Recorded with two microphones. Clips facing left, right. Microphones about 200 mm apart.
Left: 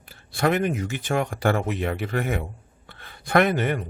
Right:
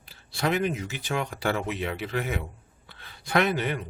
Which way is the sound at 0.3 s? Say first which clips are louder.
Left 4 dB; 50° left (ahead or behind).